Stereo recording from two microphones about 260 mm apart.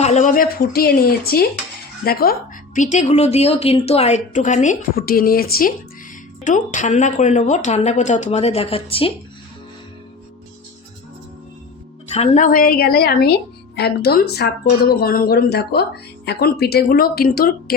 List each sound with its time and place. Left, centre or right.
0.0 s a woman's voice: left
12.0 s speech: left